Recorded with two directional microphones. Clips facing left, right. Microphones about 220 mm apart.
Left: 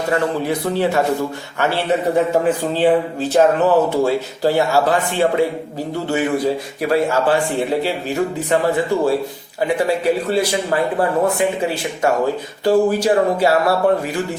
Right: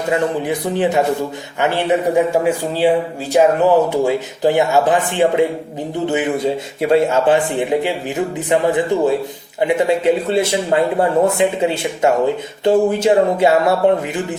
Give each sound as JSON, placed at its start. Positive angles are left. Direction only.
{"t": 0.1, "sound": "a man's voice", "side_deg": -15}